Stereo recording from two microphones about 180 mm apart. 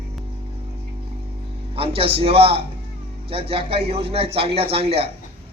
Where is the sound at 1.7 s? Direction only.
30° right (ahead or behind).